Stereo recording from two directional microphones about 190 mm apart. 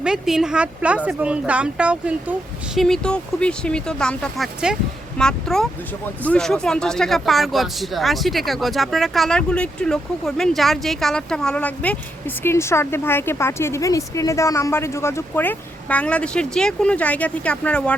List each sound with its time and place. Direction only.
0.0 s a woman's voice: 5° right (ahead or behind)